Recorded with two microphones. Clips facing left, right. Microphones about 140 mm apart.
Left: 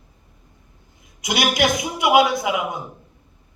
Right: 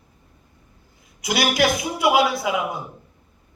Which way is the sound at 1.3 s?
20° left (ahead or behind).